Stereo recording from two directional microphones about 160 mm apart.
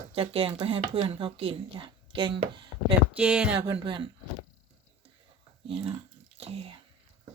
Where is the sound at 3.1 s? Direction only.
10° right (ahead or behind).